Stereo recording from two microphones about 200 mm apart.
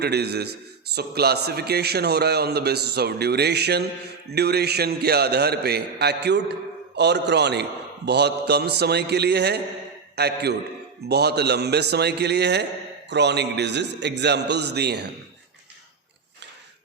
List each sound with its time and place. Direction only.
0.0 s a man's voice: 55° right (ahead or behind)